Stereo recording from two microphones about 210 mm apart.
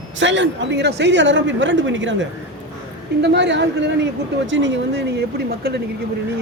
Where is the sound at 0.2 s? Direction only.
60° right (ahead or behind).